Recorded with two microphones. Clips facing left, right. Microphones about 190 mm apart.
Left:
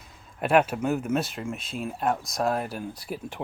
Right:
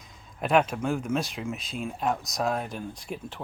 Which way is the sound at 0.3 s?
5° left (ahead or behind).